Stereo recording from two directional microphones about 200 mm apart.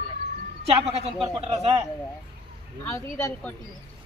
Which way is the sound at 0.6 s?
30° right (ahead or behind).